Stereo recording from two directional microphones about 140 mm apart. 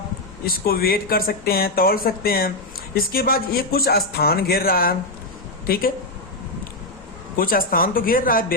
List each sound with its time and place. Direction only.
0.4 s speech: 90° left
7.3 s speech: 90° left